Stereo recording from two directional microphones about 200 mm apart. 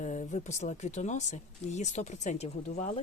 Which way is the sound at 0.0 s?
35° left (ahead or behind).